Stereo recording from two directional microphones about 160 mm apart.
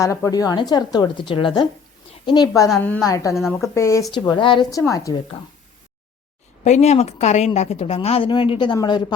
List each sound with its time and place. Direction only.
0.0 s a woman's voice: 20° left (ahead or behind)
4.1 s a woman's voice: 30° left (ahead or behind)
4.9 s a woman's voice: 20° left (ahead or behind)
6.7 s a woman's voice: 45° left (ahead or behind); by 9.1 s 30° left (ahead or behind)